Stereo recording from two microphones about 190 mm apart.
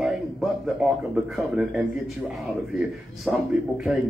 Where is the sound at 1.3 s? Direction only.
Centre (ahead or behind).